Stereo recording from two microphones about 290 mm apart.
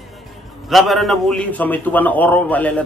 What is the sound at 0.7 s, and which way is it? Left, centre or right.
A man's voice, centre.